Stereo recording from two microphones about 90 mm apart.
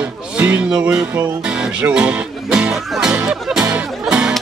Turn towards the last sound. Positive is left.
turn(degrees=-10)  # may be behind; listen again after turning